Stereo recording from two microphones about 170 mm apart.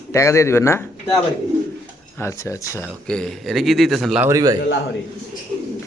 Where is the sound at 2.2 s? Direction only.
15° left (ahead or behind).